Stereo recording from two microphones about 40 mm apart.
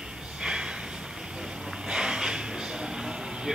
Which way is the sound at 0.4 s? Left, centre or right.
Right.